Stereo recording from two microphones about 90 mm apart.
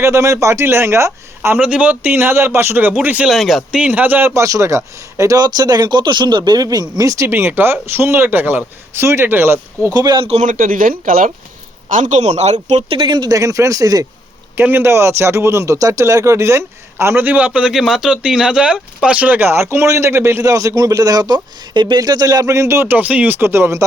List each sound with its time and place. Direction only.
0.0 s speech: 35° right (ahead or behind)
3.2 s speech: centre (ahead or behind)
3.8 s speech: 15° right (ahead or behind)
4.4 s speech: 35° right (ahead or behind)
7.3 s speech: 25° right (ahead or behind)
9.9 s speech: 50° right (ahead or behind)
12.9 s speech: 55° right (ahead or behind)
13.3 s a man's voice: 40° right (ahead or behind)
14.5 s a man's voice: 25° right (ahead or behind)
22.9 s speech: 15° right (ahead or behind)